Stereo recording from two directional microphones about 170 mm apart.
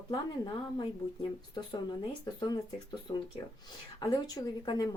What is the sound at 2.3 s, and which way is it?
Speech, 25° left (ahead or behind).